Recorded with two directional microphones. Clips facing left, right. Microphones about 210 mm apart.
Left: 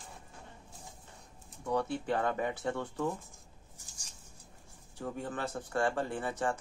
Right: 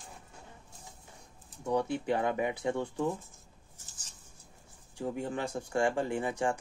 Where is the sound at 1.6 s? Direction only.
15° right (ahead or behind).